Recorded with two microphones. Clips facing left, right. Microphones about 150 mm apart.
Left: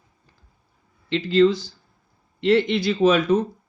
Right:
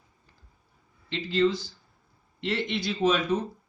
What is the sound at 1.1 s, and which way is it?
Speech, 90° left.